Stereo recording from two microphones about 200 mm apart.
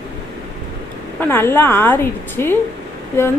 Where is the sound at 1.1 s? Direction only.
10° left (ahead or behind).